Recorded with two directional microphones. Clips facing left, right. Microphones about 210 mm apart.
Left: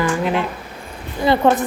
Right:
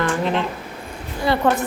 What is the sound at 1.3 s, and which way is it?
Speech, 25° left (ahead or behind).